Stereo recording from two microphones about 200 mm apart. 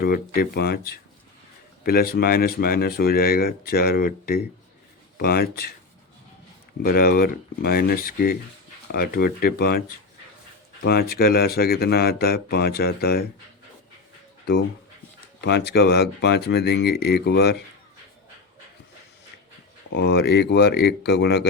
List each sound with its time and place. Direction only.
0.0 s speech: 50° left (ahead or behind)
6.8 s speech: 50° left (ahead or behind)
10.8 s speech: 50° left (ahead or behind)
15.4 s speech: 55° left (ahead or behind)
19.9 s speech: 60° left (ahead or behind)